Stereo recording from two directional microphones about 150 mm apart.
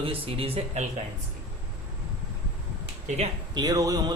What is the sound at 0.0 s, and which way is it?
Speech, 40° right (ahead or behind).